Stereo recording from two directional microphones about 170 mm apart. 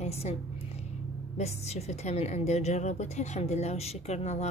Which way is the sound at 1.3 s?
40° left (ahead or behind).